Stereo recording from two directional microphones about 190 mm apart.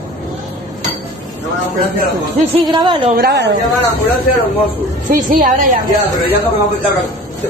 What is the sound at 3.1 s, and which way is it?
Speech, 60° right (ahead or behind).